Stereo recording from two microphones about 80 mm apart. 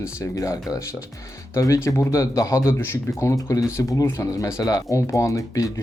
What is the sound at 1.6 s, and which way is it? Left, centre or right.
Speech, left.